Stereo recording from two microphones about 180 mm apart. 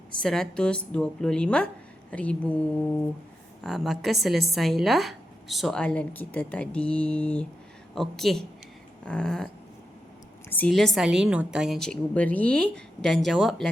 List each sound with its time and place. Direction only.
0.2 s a woman's voice: 5° left (ahead or behind)
10.5 s a woman's voice: 5° left (ahead or behind)